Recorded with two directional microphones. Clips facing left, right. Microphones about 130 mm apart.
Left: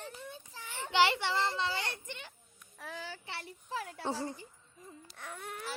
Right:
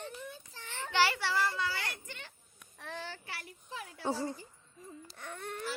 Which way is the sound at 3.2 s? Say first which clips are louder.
Left 2 dB; 25° left (ahead or behind).